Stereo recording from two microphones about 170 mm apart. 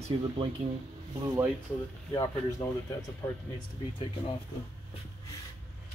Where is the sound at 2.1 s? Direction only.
20° left (ahead or behind).